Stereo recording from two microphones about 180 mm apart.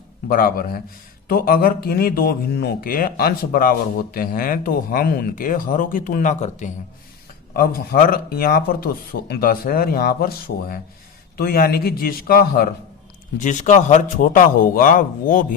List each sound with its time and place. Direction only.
0.3 s speech: 50° left (ahead or behind)
7.5 s speech: 55° left (ahead or behind)
13.4 s speech: 45° left (ahead or behind)